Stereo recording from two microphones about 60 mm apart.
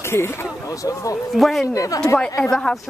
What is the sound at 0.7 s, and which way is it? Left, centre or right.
Speech, left.